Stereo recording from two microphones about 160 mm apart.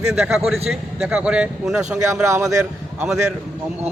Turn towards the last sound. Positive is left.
turn(degrees=-5)  # may be behind; listen again after turning